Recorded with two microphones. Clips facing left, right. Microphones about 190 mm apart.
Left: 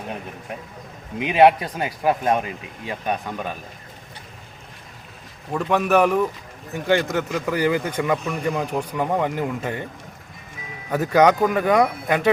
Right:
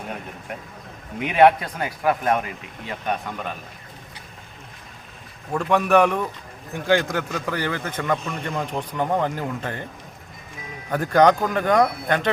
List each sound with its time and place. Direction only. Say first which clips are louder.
1.2 s a man's voice: left 1 dB; 15° left (ahead or behind)
5.5 s a man's voice: even; 5° left (ahead or behind)
10.9 s a man's voice: even; 5° left (ahead or behind)